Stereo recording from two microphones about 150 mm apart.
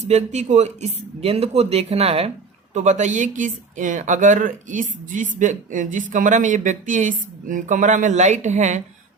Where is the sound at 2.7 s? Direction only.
55° right (ahead or behind).